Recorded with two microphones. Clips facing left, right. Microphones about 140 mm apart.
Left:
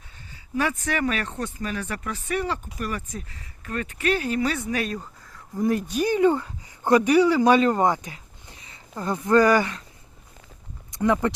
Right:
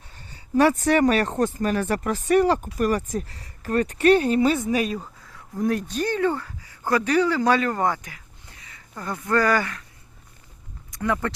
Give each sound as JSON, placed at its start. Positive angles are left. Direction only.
{"t": 0.5, "sound": "speech", "side_deg": -40}
{"t": 4.9, "sound": "speech", "side_deg": -5}
{"t": 10.9, "sound": "speech", "side_deg": 20}